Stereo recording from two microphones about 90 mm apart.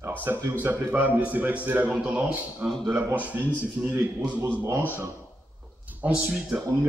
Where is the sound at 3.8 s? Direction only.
15° right (ahead or behind).